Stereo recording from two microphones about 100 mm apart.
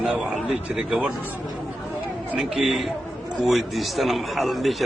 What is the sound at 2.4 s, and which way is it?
A man's voice, 5° right (ahead or behind).